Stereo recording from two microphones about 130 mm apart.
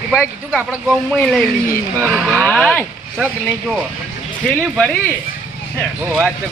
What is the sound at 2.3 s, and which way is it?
Speech, 5° left (ahead or behind).